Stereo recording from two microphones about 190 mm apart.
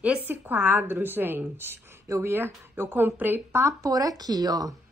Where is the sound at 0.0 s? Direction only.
10° right (ahead or behind).